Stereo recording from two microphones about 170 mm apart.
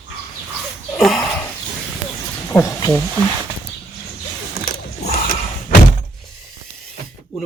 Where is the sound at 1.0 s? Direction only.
Centre (ahead or behind).